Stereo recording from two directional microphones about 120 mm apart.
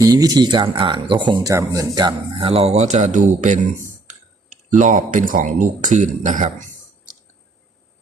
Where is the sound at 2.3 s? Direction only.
50° right (ahead or behind); by 6.7 s 90° right.